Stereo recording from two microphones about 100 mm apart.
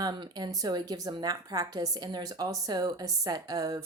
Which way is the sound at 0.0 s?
40° right (ahead or behind).